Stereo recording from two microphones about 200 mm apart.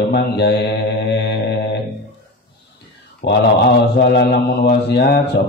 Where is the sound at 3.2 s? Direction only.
60° left (ahead or behind).